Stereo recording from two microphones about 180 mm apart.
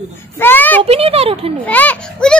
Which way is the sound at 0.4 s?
10° left (ahead or behind).